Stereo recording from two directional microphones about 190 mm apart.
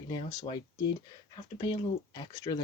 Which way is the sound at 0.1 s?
25° left (ahead or behind).